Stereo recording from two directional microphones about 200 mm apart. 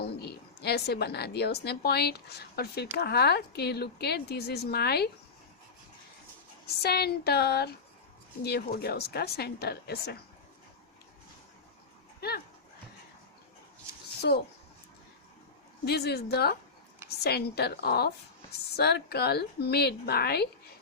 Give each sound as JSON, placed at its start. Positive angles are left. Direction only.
{"t": 0.0, "sound": "a woman's voice", "side_deg": 55}
{"t": 6.7, "sound": "a woman's voice", "side_deg": 55}
{"t": 15.8, "sound": "a woman's voice", "side_deg": 55}